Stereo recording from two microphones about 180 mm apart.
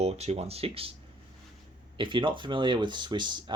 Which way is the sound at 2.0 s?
25° right (ahead or behind).